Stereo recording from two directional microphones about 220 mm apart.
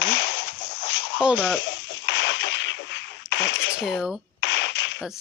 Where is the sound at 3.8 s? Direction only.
Centre (ahead or behind).